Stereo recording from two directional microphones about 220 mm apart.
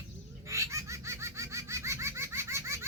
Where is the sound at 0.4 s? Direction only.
15° right (ahead or behind).